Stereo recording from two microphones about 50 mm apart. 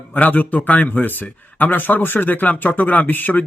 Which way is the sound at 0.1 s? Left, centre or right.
Left.